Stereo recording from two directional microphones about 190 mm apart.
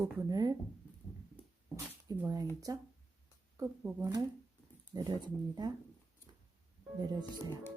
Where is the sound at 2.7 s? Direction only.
20° right (ahead or behind).